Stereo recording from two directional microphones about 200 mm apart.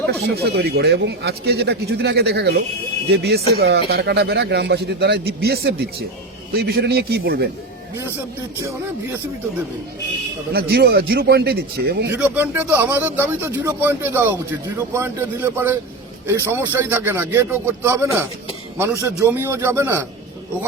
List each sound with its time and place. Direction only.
0.1 s a man's voice: 50° right (ahead or behind)
10.5 s speech: 50° right (ahead or behind)
12.1 s speech: 10° right (ahead or behind)